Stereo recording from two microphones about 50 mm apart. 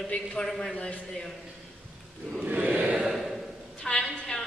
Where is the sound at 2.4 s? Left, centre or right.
Right.